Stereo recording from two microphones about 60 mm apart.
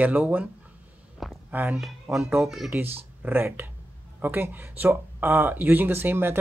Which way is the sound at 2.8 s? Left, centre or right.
Right.